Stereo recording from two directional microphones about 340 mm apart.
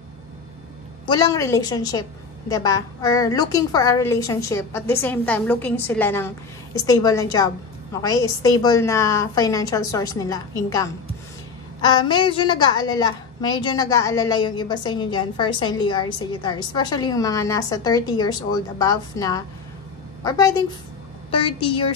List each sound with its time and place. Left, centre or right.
1.0 s a woman's voice: centre